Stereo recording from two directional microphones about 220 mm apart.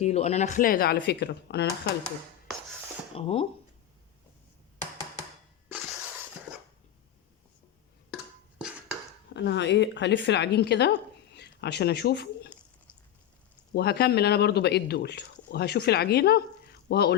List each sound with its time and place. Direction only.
0.0 s speech: 30° left (ahead or behind); by 1.9 s 50° left (ahead or behind)
3.2 s speech: 25° left (ahead or behind)
8.1 s a sound: 5° right (ahead or behind)
9.3 s speech: 50° left (ahead or behind)
13.7 s speech: 45° left (ahead or behind)